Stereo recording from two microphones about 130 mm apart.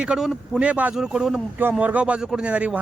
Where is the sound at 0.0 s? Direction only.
5° right (ahead or behind).